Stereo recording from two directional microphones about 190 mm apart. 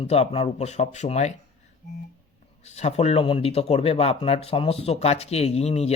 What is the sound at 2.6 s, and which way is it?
Speech, 35° left (ahead or behind).